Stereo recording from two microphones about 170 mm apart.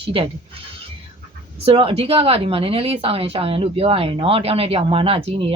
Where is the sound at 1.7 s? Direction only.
35° right (ahead or behind).